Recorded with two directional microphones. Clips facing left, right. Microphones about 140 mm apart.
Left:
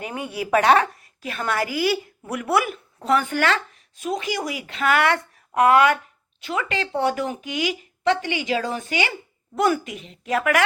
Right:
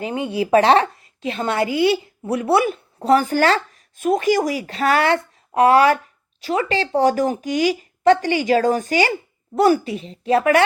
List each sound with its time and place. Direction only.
0.0 s a woman's voice: 25° right (ahead or behind)
3.9 s speech: 50° right (ahead or behind); by 10.6 s 30° right (ahead or behind)